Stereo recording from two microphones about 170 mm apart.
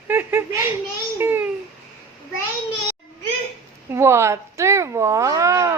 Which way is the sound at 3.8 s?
15° right (ahead or behind).